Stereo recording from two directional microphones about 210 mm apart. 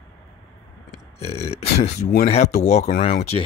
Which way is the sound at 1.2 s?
30° left (ahead or behind).